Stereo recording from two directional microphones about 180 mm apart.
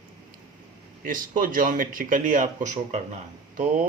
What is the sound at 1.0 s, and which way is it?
Speech, 50° right (ahead or behind).